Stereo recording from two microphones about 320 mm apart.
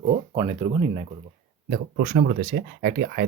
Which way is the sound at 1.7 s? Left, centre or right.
Right.